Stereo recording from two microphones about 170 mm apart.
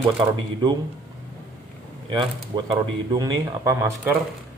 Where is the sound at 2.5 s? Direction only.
25° right (ahead or behind).